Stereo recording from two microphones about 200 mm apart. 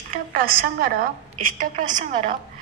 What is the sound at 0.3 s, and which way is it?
A woman's voice, 45° right (ahead or behind).